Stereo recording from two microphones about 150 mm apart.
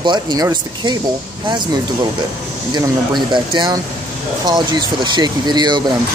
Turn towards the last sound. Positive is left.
turn(degrees=-30)  # may be behind; listen again after turning